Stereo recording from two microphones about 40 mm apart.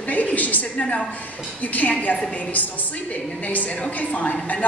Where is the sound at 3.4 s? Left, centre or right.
Left.